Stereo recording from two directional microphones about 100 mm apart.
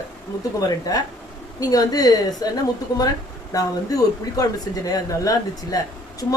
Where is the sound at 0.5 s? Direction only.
40° left (ahead or behind).